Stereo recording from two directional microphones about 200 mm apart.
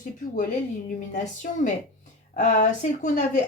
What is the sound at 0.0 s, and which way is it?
Speech, 40° left (ahead or behind).